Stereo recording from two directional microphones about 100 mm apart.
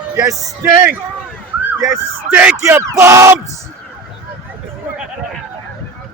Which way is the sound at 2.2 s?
15° right (ahead or behind).